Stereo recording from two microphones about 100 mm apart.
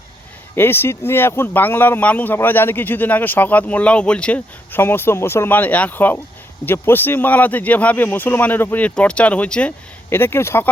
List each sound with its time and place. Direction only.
0.5 s speech: 25° left (ahead or behind)
10.1 s speech: 25° left (ahead or behind)